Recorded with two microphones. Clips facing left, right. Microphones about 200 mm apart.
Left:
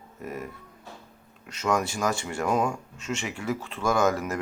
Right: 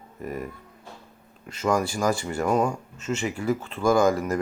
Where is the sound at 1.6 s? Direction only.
5° right (ahead or behind).